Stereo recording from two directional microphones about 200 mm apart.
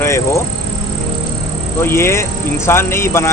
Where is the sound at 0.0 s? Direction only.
15° left (ahead or behind).